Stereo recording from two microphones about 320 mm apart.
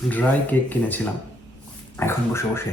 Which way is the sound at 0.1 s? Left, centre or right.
Centre.